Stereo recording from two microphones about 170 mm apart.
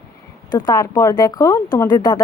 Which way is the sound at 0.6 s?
20° left (ahead or behind).